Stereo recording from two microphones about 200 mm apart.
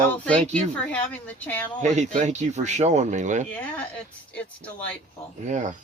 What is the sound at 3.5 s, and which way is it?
Speech, 5° left (ahead or behind).